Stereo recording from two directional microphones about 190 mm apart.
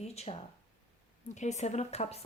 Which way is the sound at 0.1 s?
35° left (ahead or behind).